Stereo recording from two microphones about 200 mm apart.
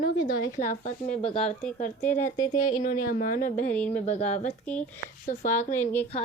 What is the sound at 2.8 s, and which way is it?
Speech, 45° left (ahead or behind).